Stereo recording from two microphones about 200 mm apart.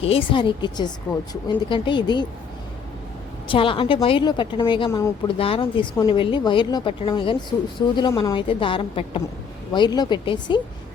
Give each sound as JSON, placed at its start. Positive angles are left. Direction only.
{"t": 0.0, "sound": "a woman's voice", "side_deg": 30}
{"t": 3.5, "sound": "a woman's voice", "side_deg": 25}